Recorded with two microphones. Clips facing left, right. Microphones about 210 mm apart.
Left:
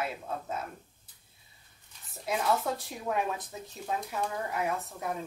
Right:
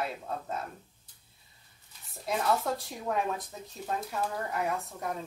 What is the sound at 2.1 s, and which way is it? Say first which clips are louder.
Speech: even; centre (ahead or behind).